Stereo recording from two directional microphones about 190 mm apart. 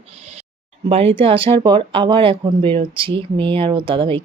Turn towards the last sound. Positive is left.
turn(degrees=-25)  # may be behind; listen again after turning